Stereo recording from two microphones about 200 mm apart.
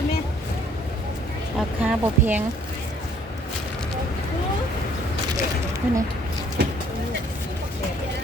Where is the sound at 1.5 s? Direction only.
5° right (ahead or behind).